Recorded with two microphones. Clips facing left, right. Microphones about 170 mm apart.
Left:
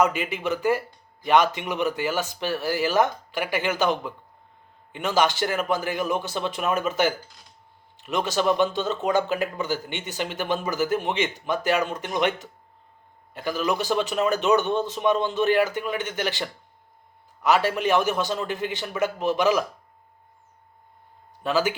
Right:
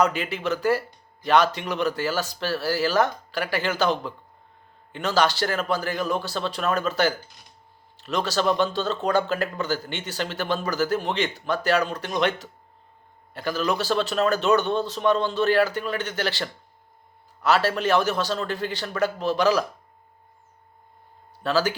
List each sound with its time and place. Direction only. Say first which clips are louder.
0.0 s speech: even; 15° left (ahead or behind)
21.4 s speech: even; 15° left (ahead or behind)